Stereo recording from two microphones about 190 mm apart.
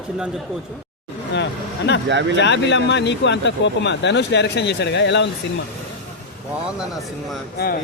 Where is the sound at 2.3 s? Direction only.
65° left (ahead or behind).